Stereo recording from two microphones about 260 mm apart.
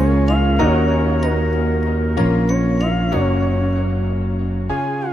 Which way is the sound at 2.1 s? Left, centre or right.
Centre.